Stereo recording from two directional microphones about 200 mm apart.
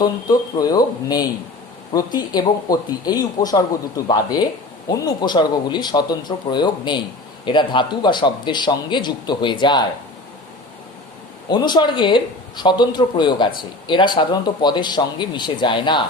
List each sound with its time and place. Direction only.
0.0 s speech: 20° left (ahead or behind)
11.4 s speech: 20° left (ahead or behind)